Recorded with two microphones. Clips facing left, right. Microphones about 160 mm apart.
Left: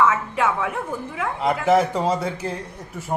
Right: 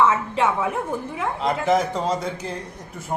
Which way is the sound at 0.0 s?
25° right (ahead or behind).